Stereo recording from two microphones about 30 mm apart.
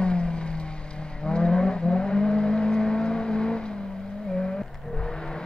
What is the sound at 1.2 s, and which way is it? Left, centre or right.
Vehicle, left.